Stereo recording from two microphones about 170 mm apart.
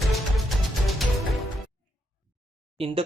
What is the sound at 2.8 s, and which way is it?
Speech, 35° right (ahead or behind).